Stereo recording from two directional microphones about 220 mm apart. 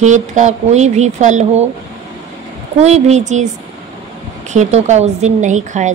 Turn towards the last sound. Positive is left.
turn(degrees=-35)  # may be behind; listen again after turning